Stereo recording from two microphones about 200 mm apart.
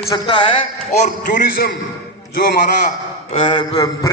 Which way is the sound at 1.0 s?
40° left (ahead or behind).